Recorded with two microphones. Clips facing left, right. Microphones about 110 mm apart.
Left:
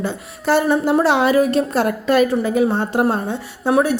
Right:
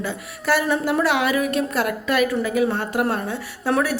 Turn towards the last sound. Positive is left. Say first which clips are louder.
# left 4 dB
turn(degrees=25)  # may be behind; listen again after turning